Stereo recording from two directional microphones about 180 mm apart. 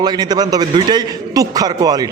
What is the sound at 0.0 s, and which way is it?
A man's voice, 20° right (ahead or behind).